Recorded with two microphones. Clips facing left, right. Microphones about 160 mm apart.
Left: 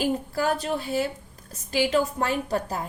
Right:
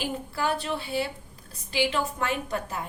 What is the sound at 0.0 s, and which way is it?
A woman's voice, 40° left (ahead or behind).